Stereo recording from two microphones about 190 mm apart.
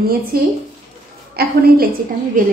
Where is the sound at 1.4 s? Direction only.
55° right (ahead or behind).